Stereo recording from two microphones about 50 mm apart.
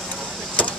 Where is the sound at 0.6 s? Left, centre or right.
Left.